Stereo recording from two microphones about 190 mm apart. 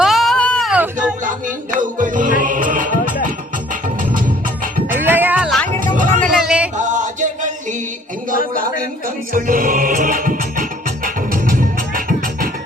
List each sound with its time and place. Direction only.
0.0 s a sound: centre (ahead or behind)
1.2 s music: 45° right (ahead or behind)
4.9 s music: 10° right (ahead or behind)
5.8 s music: 45° right (ahead or behind)
6.3 s music: 5° right (ahead or behind)
6.7 s a sound: 40° right (ahead or behind)
8.5 s music: 45° right (ahead or behind)